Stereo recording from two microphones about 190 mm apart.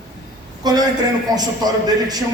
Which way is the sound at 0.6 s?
20° right (ahead or behind).